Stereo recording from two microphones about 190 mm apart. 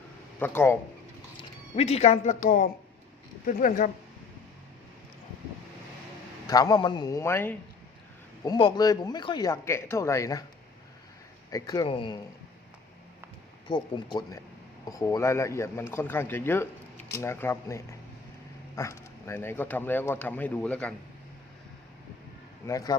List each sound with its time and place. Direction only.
0.3 s speech: 10° left (ahead or behind)
1.4 s speech: 35° left (ahead or behind)
6.5 s speech: 20° left (ahead or behind)
8.4 s speech: 25° left (ahead or behind)
11.5 s speech: 20° left (ahead or behind)
13.7 s speech: 25° left (ahead or behind); by 20.9 s 5° left (ahead or behind)
22.6 s speech: 20° left (ahead or behind)